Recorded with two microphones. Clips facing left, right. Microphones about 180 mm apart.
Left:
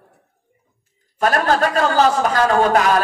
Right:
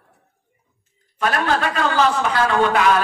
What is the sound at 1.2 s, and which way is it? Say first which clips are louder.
A man's voice: left 3 dB; 40° left (ahead or behind).